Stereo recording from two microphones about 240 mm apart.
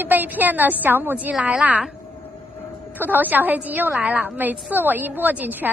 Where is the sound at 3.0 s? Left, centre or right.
Centre.